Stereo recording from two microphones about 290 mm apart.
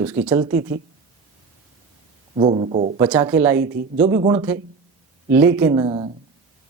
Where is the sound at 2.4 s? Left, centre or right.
Right.